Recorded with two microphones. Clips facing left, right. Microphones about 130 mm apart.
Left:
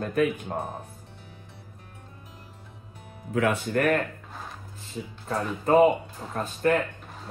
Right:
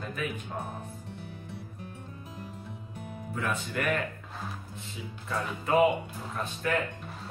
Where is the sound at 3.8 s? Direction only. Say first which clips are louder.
Left 6 dB; 45° left (ahead or behind).